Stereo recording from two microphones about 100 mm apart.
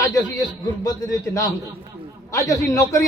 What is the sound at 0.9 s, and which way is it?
A man's voice, 40° left (ahead or behind).